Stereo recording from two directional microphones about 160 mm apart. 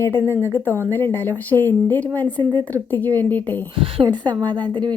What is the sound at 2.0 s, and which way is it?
Speech, 25° right (ahead or behind).